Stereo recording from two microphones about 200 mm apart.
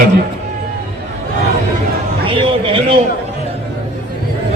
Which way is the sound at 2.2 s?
25° right (ahead or behind).